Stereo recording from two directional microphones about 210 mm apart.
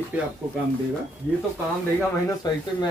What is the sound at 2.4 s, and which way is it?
Speech, 20° left (ahead or behind).